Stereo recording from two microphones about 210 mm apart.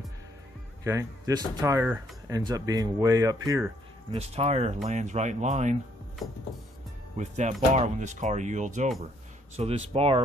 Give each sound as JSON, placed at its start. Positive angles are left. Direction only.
{"t": 0.8, "sound": "speech", "side_deg": -15}
{"t": 4.2, "sound": "speech", "side_deg": -30}
{"t": 7.2, "sound": "speech", "side_deg": -35}